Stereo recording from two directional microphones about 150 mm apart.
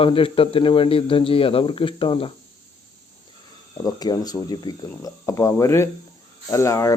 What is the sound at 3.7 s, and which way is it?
Speech, 25° left (ahead or behind).